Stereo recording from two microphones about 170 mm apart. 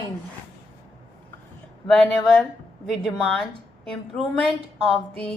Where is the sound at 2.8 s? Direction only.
Centre (ahead or behind).